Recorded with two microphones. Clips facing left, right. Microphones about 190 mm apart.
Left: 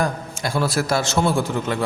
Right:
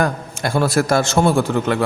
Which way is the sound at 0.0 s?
60° right (ahead or behind).